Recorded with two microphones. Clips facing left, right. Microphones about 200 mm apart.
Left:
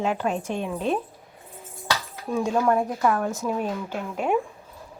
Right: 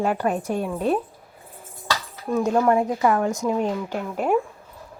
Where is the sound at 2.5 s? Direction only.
10° right (ahead or behind).